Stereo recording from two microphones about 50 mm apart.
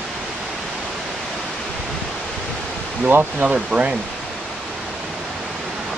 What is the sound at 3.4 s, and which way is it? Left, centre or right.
Speech, right.